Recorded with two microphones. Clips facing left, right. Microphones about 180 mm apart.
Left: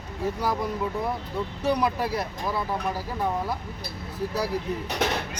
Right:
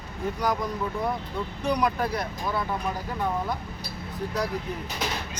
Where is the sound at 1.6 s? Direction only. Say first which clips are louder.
Left 1 dB; 5° left (ahead or behind).